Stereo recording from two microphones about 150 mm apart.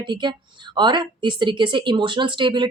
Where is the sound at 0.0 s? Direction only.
30° right (ahead or behind).